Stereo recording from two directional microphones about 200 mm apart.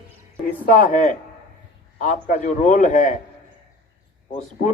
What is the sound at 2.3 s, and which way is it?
Speech, 40° left (ahead or behind).